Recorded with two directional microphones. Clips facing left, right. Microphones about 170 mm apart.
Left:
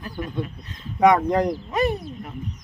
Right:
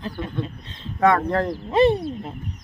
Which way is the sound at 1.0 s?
15° left (ahead or behind).